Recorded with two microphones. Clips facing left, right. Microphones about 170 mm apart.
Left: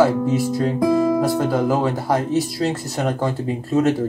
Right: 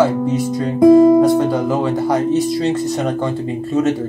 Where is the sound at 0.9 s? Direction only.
25° right (ahead or behind).